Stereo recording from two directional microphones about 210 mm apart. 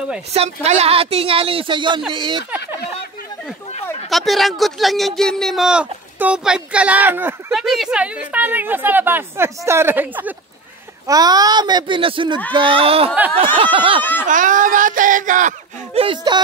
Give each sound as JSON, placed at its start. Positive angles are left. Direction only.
{"t": 0.3, "sound": "a woman's voice", "side_deg": -30}
{"t": 4.1, "sound": "a woman's voice", "side_deg": 0}
{"t": 14.2, "sound": "speech", "side_deg": -40}